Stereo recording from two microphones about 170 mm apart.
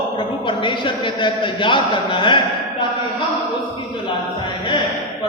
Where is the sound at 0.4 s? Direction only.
30° left (ahead or behind).